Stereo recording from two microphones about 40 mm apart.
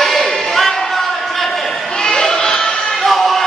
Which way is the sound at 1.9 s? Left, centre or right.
Centre.